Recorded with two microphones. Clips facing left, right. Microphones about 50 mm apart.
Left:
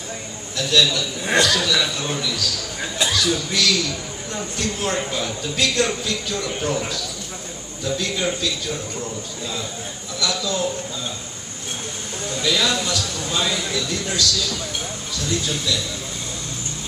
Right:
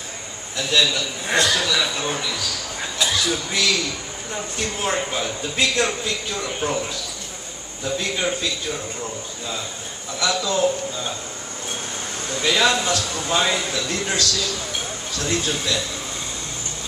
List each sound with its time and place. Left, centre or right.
0.6 s a man's voice: centre
7.8 s a man's voice: right
10.1 s a man's voice: right
12.4 s a man's voice: right